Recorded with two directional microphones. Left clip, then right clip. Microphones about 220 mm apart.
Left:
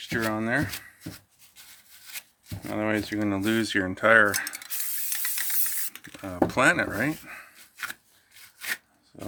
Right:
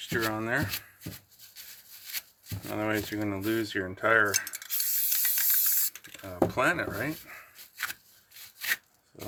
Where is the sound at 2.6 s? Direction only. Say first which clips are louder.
Left 3 dB; 30° left (ahead or behind).